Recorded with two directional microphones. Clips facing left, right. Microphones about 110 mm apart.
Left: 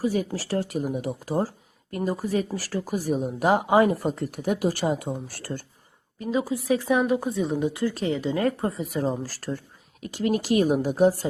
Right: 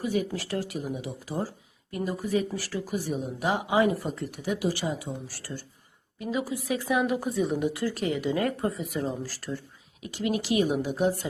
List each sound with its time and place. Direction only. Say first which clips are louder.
0.0 s speech: left 3 dB; 35° left (ahead or behind)
0.7 s speech: left 6 dB; 45° left (ahead or behind)
6.4 s a woman's voice: left 5 dB; 25° left (ahead or behind)